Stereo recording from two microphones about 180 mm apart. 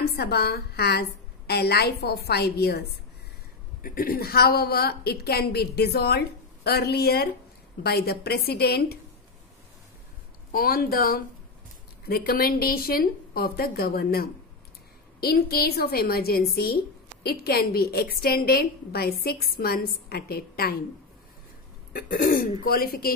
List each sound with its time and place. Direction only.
0.0 s a woman's voice: 60° left (ahead or behind)
3.8 s a woman's voice: 50° left (ahead or behind)
10.5 s a woman's voice: 55° left (ahead or behind)
21.9 s speech: 50° left (ahead or behind)